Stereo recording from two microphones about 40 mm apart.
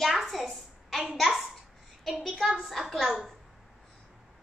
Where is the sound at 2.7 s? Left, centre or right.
Centre.